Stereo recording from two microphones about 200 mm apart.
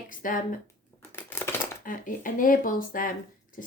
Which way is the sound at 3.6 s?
40° left (ahead or behind).